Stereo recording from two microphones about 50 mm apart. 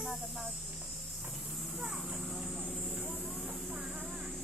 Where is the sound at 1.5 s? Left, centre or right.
Centre.